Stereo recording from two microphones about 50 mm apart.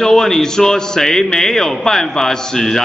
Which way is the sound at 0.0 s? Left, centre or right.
Centre.